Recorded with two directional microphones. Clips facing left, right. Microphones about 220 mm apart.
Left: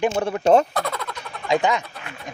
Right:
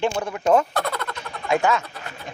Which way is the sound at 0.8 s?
Centre (ahead or behind).